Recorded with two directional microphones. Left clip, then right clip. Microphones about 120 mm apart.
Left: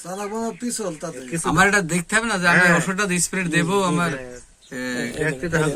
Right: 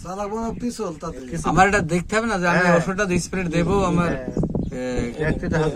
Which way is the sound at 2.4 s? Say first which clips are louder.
Left 2 dB; 90° right.